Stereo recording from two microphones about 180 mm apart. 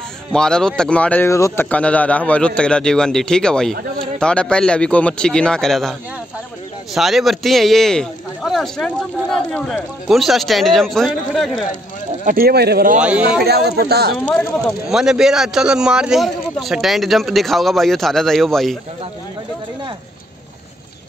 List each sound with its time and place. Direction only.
0.3 s a man's voice: 5° left (ahead or behind)
12.3 s speech: 55° right (ahead or behind)
13.0 s speech: 5° right (ahead or behind)
13.4 s speech: 60° right (ahead or behind)
14.9 s a man's voice: 5° right (ahead or behind)